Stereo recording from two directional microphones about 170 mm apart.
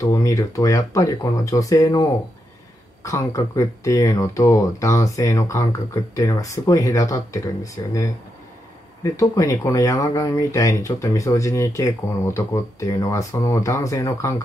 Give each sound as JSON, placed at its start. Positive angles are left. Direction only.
{"t": 0.0, "sound": "speech", "side_deg": 20}